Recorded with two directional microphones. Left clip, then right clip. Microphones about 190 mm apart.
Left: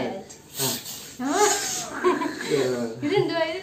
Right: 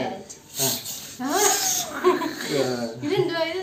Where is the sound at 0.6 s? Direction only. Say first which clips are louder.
Right 2 dB; centre (ahead or behind).